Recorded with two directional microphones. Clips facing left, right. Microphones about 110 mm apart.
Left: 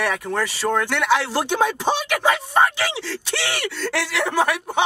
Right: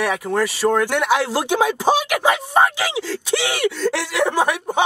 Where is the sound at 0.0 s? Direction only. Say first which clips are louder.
Right 3 dB; 10° right (ahead or behind).